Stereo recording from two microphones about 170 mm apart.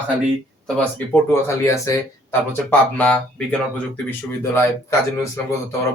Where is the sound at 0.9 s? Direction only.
15° left (ahead or behind).